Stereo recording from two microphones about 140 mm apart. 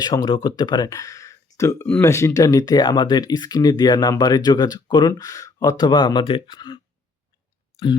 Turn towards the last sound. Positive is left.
turn(degrees=30)  # may be behind; listen again after turning